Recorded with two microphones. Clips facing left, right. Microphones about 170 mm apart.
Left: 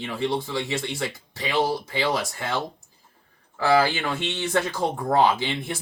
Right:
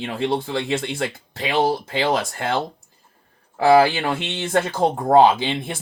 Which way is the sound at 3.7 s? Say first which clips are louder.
Right 5 dB; 55° right (ahead or behind).